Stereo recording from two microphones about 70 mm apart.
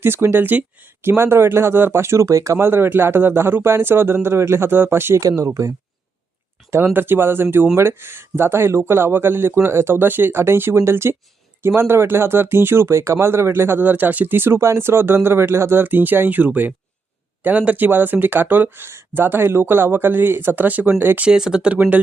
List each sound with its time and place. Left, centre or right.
0.0 s speech: right
2.6 s speech: right
6.7 s speech: right
21.2 s speech: centre